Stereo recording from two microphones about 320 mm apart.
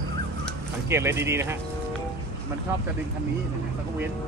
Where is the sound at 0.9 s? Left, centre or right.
Centre.